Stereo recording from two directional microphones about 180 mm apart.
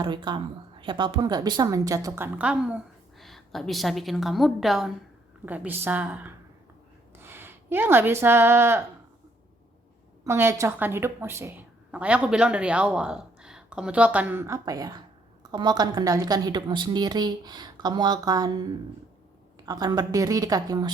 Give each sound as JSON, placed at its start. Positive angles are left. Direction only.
{"t": 0.0, "sound": "a woman's voice", "side_deg": -25}
{"t": 10.2, "sound": "a woman's voice", "side_deg": -15}